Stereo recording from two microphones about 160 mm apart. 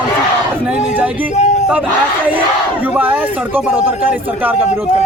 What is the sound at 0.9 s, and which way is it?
Speech, 10° right (ahead or behind).